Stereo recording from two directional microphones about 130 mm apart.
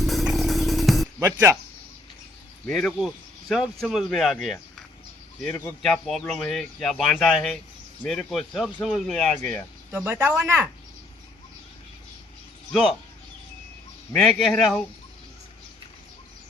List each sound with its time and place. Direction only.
0.1 s music: centre (ahead or behind)
1.2 s speech: 20° right (ahead or behind)
2.6 s speech: 5° left (ahead or behind)
5.8 s speech: centre (ahead or behind)
9.9 s speech: 15° right (ahead or behind)
12.7 s speech: centre (ahead or behind)
14.1 s speech: 5° left (ahead or behind)